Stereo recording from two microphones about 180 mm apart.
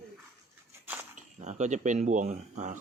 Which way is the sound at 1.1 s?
40° right (ahead or behind).